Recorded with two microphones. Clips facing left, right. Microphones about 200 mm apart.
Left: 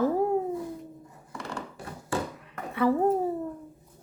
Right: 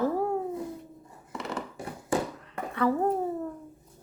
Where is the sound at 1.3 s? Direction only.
20° right (ahead or behind).